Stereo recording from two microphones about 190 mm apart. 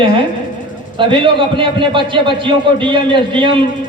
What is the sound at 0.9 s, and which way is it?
A man's voice, 25° right (ahead or behind).